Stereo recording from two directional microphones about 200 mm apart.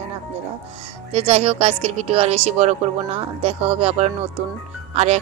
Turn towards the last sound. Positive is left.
turn(degrees=-35)  # may be behind; listen again after turning